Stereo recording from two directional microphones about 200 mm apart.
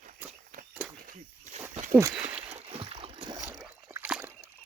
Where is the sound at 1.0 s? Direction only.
40° right (ahead or behind).